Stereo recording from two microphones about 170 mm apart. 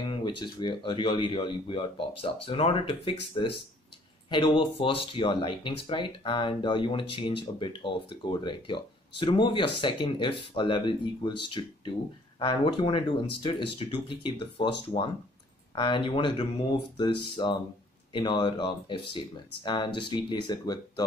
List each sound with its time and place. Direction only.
0.0 s speech: 30° left (ahead or behind)